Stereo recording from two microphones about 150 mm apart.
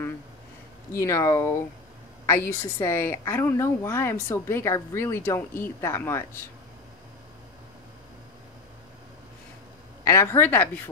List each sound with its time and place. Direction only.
0.9 s a woman's voice: 20° left (ahead or behind)
10.0 s a woman's voice: 20° left (ahead or behind)